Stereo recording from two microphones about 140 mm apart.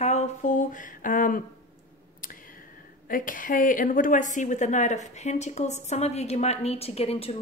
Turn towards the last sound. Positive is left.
turn(degrees=45)  # may be behind; listen again after turning